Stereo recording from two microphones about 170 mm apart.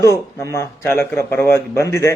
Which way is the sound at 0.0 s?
15° left (ahead or behind).